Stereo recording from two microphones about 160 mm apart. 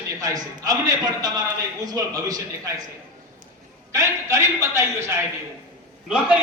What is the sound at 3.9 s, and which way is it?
A man's voice, 20° right (ahead or behind).